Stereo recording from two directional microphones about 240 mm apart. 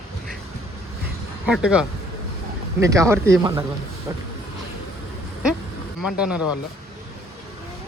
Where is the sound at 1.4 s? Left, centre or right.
Centre.